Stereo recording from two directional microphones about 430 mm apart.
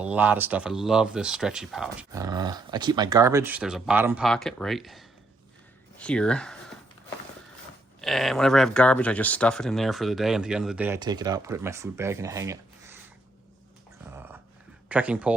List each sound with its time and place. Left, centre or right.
0.0 s speech: centre
8.0 s speech: centre
14.8 s speech: centre